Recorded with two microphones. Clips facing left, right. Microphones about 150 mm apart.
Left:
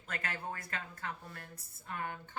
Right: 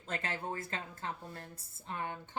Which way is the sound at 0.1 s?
25° right (ahead or behind).